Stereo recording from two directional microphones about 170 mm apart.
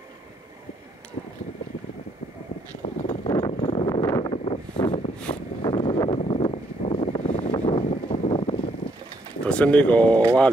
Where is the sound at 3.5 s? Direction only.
35° left (ahead or behind).